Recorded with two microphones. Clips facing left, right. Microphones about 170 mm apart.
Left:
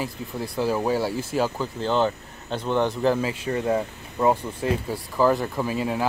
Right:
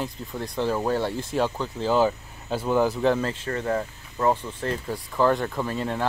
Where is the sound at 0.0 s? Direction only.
5° left (ahead or behind).